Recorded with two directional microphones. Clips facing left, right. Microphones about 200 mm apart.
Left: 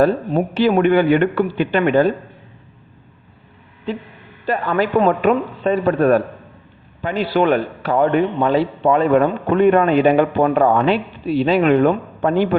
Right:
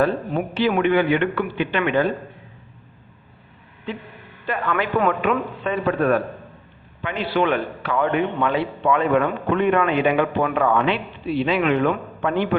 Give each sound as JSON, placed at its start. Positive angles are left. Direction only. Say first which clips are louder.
{"t": 0.0, "sound": "a man's voice", "louder": "left 5 dB", "side_deg": 40}
{"t": 4.4, "sound": "a man's voice", "louder": "left 5 dB", "side_deg": 35}